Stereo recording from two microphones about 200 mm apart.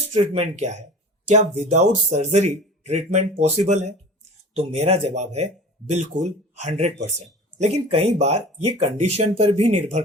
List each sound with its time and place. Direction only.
0.1 s speech: 35° right (ahead or behind)
6.6 s speech: 35° right (ahead or behind)